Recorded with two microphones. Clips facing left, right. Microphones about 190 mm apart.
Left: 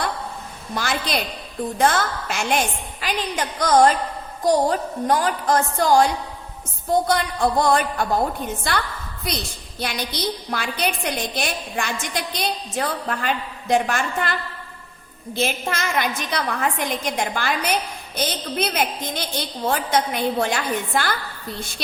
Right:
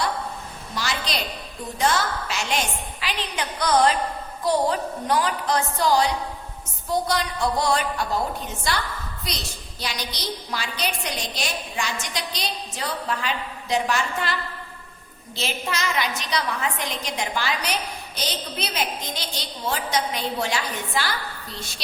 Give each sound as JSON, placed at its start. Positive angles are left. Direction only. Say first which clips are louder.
{"t": 0.7, "sound": "a woman's voice", "louder": "left 4 dB", "side_deg": 50}
{"t": 15.4, "sound": "a woman's voice", "louder": "left 4 dB", "side_deg": 50}